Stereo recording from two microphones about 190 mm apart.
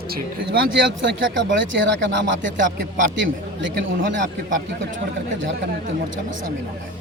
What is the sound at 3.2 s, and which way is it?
Speech, 80° right.